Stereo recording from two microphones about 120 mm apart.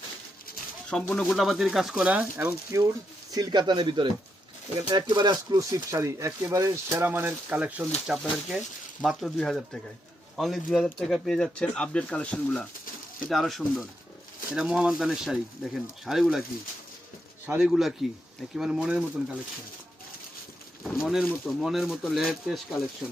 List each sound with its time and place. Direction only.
0.9 s speech: 10° left (ahead or behind); by 2.6 s 10° right (ahead or behind)
3.3 s speech: 35° right (ahead or behind)
7.0 s speech: 15° right (ahead or behind)
8.0 s speech: centre (ahead or behind)
17.6 s speech: 5° right (ahead or behind)
21.0 s speech: 5° right (ahead or behind)